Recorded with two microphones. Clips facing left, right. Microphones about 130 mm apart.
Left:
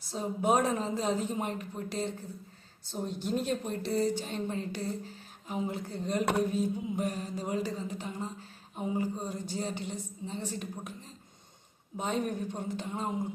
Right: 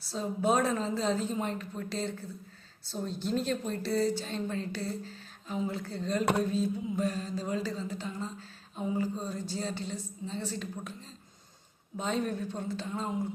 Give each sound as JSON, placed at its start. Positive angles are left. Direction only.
{"t": 0.0, "sound": "speech", "side_deg": 15}
{"t": 11.9, "sound": "speech", "side_deg": 15}